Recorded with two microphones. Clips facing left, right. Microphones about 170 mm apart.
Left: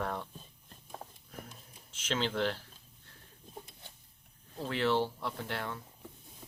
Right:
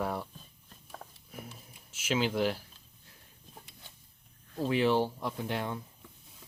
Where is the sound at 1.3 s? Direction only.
10° right (ahead or behind).